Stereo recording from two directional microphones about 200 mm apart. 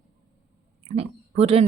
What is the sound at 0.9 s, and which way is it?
Speech, 30° right (ahead or behind).